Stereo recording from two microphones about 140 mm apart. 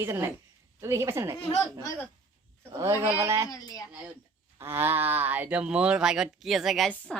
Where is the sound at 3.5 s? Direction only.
25° left (ahead or behind).